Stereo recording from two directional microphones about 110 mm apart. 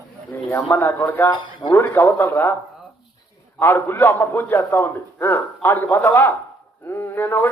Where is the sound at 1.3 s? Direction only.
45° left (ahead or behind).